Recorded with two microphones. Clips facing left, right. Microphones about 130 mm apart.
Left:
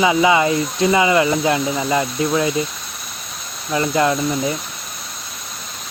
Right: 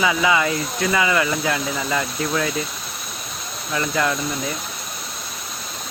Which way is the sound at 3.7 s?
25° left (ahead or behind).